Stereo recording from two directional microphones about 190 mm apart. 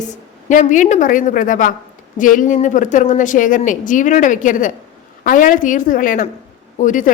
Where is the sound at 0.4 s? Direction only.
40° left (ahead or behind).